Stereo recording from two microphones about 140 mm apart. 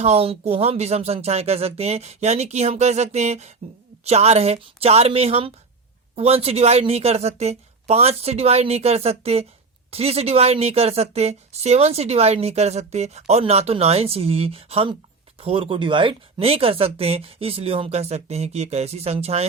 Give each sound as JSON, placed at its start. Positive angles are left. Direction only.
{"t": 0.0, "sound": "a woman's voice", "side_deg": -45}